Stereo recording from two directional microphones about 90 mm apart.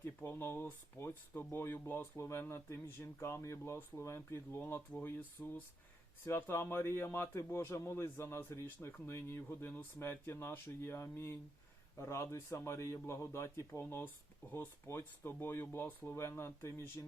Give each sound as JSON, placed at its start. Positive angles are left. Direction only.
{"t": 0.0, "sound": "a man's voice", "side_deg": 25}